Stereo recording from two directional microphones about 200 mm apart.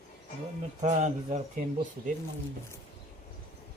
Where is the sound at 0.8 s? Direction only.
35° right (ahead or behind).